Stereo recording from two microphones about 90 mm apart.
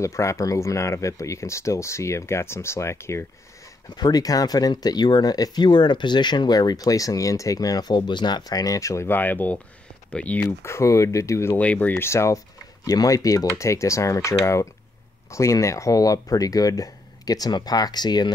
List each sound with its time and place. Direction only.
0.0 s speech: 35° left (ahead or behind)
3.9 s speech: 45° left (ahead or behind); by 10.5 s 15° left (ahead or behind)
10.6 s speech: 30° left (ahead or behind)
11.5 s speech: 15° left (ahead or behind)
12.8 s speech: 45° left (ahead or behind)